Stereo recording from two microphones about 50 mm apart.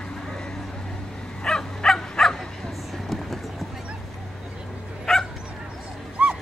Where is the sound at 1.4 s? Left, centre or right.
Centre.